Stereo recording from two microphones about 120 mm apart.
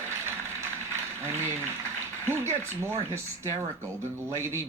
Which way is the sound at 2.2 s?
20° right (ahead or behind).